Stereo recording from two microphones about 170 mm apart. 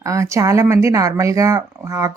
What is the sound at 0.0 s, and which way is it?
Speech, 20° right (ahead or behind).